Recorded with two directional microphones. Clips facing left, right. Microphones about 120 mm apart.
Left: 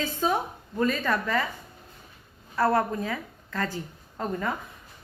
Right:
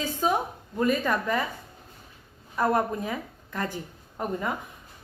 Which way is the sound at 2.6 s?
20° right (ahead or behind).